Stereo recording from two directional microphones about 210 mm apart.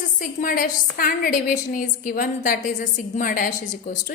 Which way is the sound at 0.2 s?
40° left (ahead or behind).